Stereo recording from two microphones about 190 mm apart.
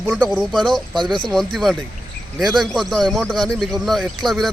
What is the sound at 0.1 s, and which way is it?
Speech, 5° right (ahead or behind).